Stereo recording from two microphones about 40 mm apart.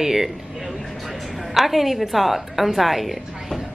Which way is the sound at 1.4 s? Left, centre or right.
Centre.